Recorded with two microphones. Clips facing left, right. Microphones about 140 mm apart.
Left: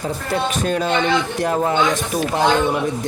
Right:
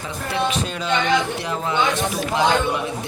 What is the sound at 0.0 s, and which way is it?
Speech, 45° left (ahead or behind).